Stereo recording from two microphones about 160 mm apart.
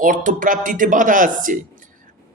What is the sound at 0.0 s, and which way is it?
A man's voice, 55° right (ahead or behind).